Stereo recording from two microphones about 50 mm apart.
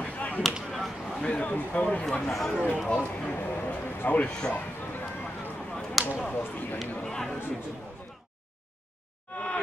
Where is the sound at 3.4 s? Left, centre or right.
Left.